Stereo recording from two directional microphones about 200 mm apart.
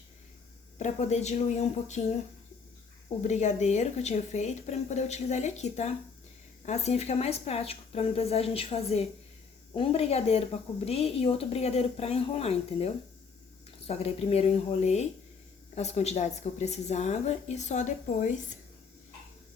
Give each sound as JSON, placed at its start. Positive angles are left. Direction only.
{"t": 0.8, "sound": "speech", "side_deg": 35}
{"t": 3.2, "sound": "speech", "side_deg": 35}